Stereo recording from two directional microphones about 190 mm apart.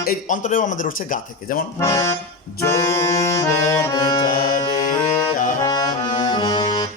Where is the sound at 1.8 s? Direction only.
15° left (ahead or behind).